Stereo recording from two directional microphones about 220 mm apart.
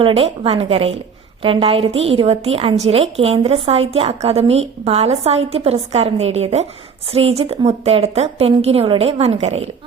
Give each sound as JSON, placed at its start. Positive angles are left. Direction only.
{"t": 0.0, "sound": "a woman's voice", "side_deg": -25}